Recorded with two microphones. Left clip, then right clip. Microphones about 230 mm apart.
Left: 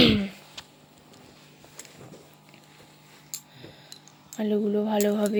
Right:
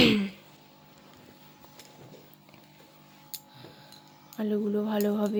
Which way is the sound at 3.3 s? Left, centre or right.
Left.